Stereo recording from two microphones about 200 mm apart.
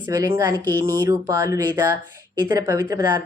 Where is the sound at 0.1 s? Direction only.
15° right (ahead or behind).